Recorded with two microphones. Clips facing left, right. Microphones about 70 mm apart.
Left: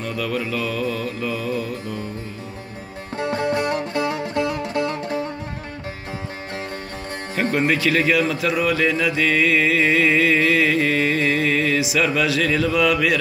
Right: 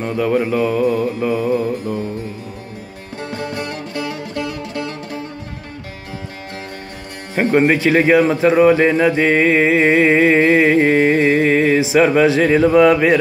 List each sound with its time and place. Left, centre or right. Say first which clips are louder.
0.0 s mantra: right 8 dB; right
3.2 s music: left 4 dB; left
7.5 s mantra: right 7 dB; right
8.0 s speech: right 7 dB; right